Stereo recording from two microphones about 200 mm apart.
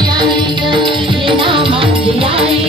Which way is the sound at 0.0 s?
20° right (ahead or behind).